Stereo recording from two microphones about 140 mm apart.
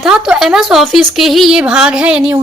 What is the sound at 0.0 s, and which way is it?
A woman's voice, 5° right (ahead or behind).